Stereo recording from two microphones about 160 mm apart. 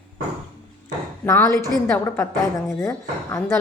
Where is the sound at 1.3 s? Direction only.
20° left (ahead or behind).